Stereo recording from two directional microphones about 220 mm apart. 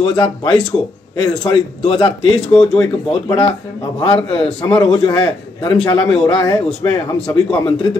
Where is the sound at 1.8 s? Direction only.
25° left (ahead or behind).